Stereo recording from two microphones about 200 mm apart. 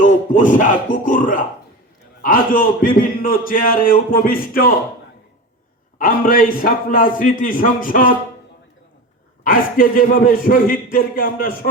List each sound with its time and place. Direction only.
0.0 s a man's voice: 40° left (ahead or behind)
6.0 s a man's voice: 45° left (ahead or behind)
9.4 s a man's voice: 45° left (ahead or behind)